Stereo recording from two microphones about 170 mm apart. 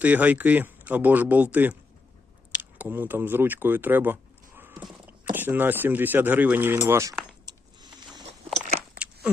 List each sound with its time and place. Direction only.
0.0 s speech: 10° right (ahead or behind)
7.4 s a sound: 25° right (ahead or behind)
8.5 s biting: 40° right (ahead or behind)